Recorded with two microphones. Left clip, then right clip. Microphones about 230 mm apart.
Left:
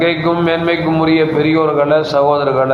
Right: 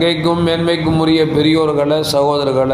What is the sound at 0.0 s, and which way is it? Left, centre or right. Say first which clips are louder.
A man's voice: left 1 dB; right.